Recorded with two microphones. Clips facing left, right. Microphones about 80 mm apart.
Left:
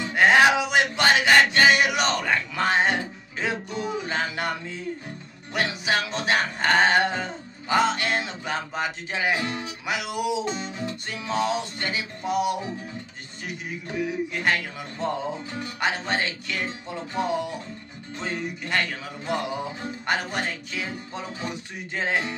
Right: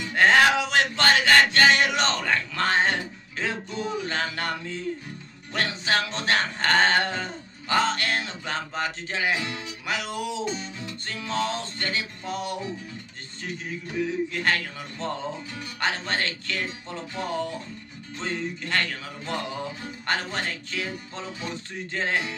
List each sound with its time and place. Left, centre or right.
0.1 s music: centre
13.8 s music: centre